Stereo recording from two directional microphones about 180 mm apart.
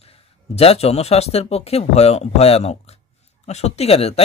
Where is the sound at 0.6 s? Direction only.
35° left (ahead or behind).